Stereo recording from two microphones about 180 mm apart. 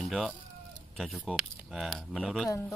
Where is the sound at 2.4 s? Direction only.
15° left (ahead or behind).